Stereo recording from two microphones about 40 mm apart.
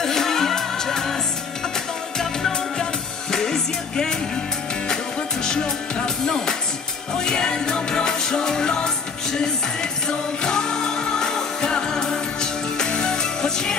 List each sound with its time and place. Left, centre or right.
0.0 s music: centre
2.8 s music: centre
6.0 s music: centre